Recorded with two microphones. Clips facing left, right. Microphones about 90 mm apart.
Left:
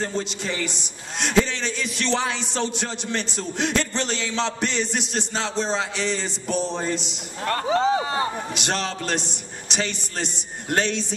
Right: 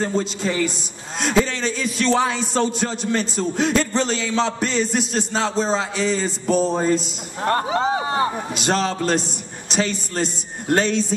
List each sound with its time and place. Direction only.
0.0 s a man's voice: 5° right (ahead or behind)
7.4 s speech: 30° right (ahead or behind)
8.5 s a man's voice: centre (ahead or behind)